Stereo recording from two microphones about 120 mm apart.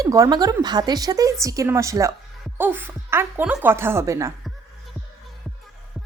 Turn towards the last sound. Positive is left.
turn(degrees=-25)  # may be behind; listen again after turning